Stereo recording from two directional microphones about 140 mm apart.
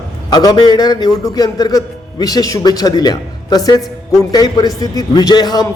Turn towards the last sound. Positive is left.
turn(degrees=30)  # may be behind; listen again after turning